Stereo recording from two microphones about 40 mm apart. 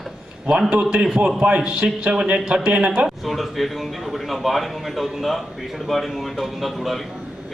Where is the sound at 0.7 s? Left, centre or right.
Right.